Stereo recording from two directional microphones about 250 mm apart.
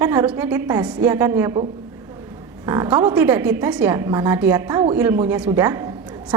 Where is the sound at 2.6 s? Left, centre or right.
Centre.